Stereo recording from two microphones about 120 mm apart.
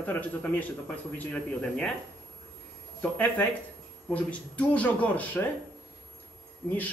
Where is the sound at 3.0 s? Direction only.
10° left (ahead or behind).